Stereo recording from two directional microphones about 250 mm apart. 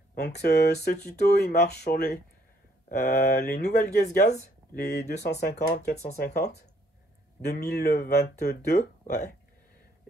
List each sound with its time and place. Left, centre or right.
0.1 s speech: left